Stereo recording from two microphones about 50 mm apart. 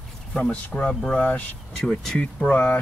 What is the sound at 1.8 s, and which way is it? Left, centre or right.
Speech, centre.